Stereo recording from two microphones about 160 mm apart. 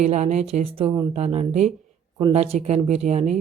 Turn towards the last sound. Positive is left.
turn(degrees=-45)  # may be behind; listen again after turning